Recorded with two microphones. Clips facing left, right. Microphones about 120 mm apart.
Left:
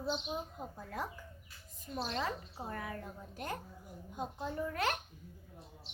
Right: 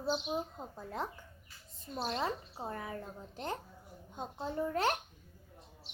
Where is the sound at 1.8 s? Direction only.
35° right (ahead or behind).